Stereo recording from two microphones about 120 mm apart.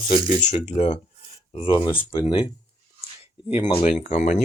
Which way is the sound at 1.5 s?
45° left (ahead or behind).